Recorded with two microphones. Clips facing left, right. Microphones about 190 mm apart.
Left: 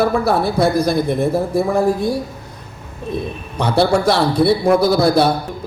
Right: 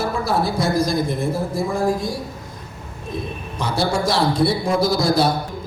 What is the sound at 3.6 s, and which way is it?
A man's voice, 60° left (ahead or behind).